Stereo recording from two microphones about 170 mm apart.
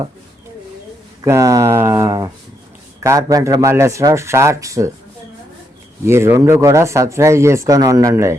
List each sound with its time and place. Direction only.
1.2 s speech: 20° right (ahead or behind)
6.1 s speech: 15° right (ahead or behind)